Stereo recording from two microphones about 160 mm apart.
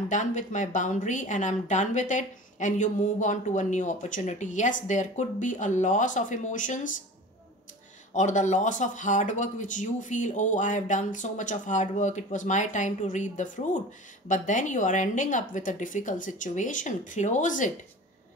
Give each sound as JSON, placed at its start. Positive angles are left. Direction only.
{"t": 0.1, "sound": "speech", "side_deg": 50}
{"t": 8.1, "sound": "speech", "side_deg": 50}